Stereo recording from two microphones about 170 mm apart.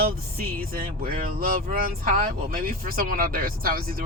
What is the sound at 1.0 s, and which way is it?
Speech, 60° right (ahead or behind).